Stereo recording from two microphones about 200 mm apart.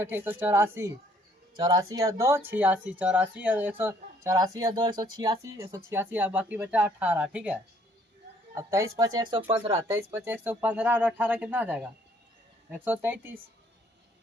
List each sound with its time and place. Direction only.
0.0 s speech: 10° right (ahead or behind); by 9.8 s 30° right (ahead or behind)
10.0 s speech: 10° right (ahead or behind)